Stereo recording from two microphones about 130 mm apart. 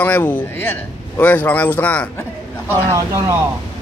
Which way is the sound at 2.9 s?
25° right (ahead or behind).